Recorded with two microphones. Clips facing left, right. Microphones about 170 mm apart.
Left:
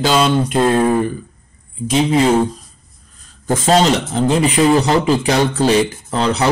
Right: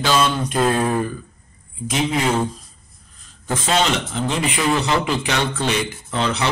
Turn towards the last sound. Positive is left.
turn(degrees=40)  # may be behind; listen again after turning